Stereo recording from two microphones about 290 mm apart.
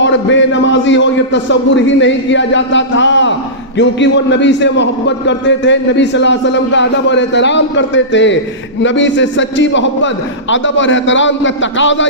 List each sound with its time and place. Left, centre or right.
0.0 s a man's voice: left